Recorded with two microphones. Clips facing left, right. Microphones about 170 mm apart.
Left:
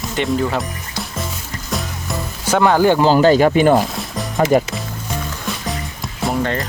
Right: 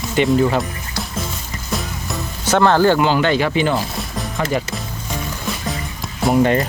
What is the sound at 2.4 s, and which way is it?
Speech, 10° left (ahead or behind).